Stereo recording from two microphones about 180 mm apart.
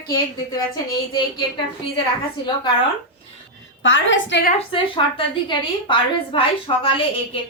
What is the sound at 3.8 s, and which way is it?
Speech, 90° left.